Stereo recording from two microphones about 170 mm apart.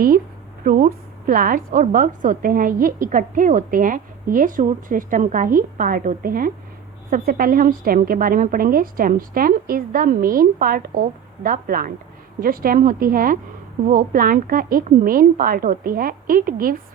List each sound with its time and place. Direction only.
0.6 s a woman's voice: 55° right (ahead or behind)